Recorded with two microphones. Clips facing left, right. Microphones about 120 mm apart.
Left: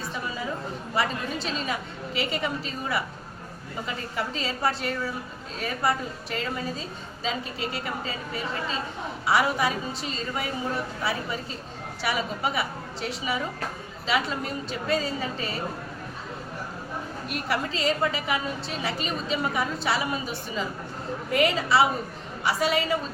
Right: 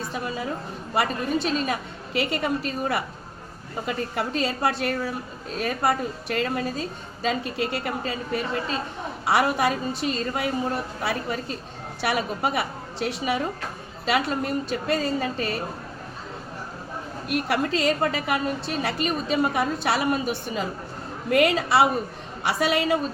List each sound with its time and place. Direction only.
0.9 s a woman's voice: 60° right (ahead or behind)
17.5 s a woman's voice: 60° right (ahead or behind)